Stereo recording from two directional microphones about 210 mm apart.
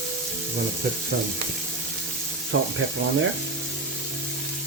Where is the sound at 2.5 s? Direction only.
65° right (ahead or behind).